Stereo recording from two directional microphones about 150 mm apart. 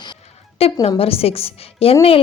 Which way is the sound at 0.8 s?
40° left (ahead or behind).